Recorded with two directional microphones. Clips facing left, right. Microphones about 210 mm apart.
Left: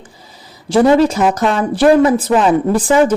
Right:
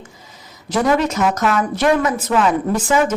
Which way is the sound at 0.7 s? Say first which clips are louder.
Left 7 dB; 30° left (ahead or behind).